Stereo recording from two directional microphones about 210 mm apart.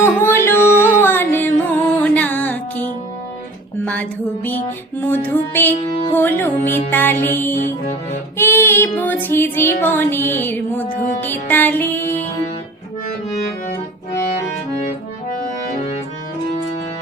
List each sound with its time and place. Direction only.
0.0 s music: 10° left (ahead or behind)
4.4 s child singing: 10° left (ahead or behind)
11.2 s music: 10° left (ahead or behind)